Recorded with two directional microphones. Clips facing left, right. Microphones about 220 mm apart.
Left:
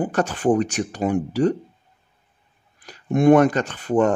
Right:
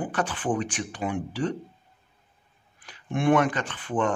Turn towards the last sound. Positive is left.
turn(degrees=40)  # may be behind; listen again after turning